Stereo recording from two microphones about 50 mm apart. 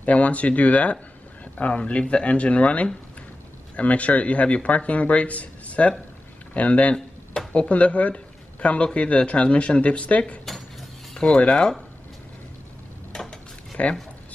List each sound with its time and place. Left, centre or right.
0.0 s speech: left
10.4 s cutlery: centre
11.1 s speech: left
13.1 s dishes: centre
13.8 s speech: left